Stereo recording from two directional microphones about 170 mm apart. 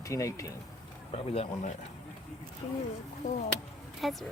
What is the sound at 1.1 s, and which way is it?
Speech, 35° left (ahead or behind).